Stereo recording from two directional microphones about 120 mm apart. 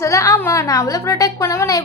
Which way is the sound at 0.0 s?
25° left (ahead or behind).